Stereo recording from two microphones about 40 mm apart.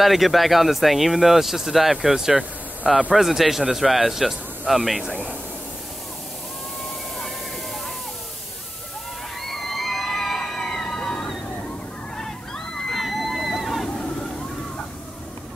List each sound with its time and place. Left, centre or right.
0.0 s speech: centre
2.1 s speech: centre
9.4 s a sound: centre; by 11.2 s left
12.2 s slosh: centre
13.0 s slosh: centre